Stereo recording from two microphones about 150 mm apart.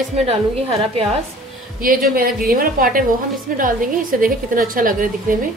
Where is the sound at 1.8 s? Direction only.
70° right (ahead or behind).